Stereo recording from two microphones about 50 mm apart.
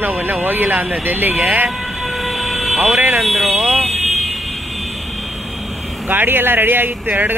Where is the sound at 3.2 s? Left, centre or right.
Centre.